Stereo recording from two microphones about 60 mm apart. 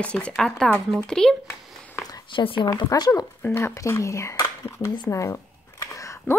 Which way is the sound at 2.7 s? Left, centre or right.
Left.